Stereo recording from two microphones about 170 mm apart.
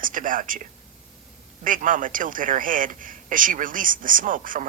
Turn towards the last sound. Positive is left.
turn(degrees=-50)  # may be behind; listen again after turning